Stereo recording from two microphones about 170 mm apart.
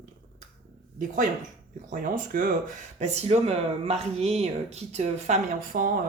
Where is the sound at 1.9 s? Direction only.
50° right (ahead or behind).